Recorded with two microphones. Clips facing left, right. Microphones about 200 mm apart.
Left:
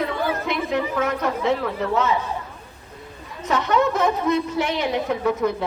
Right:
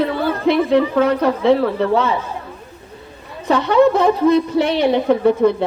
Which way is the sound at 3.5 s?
30° right (ahead or behind).